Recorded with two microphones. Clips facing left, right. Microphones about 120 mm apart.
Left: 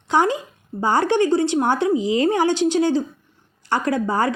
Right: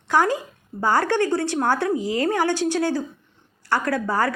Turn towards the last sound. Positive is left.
turn(degrees=20)  # may be behind; listen again after turning